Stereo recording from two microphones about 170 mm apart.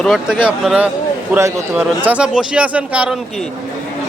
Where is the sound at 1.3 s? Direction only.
15° right (ahead or behind).